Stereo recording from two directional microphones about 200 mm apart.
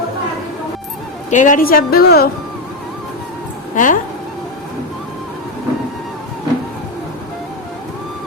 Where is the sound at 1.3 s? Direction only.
40° left (ahead or behind).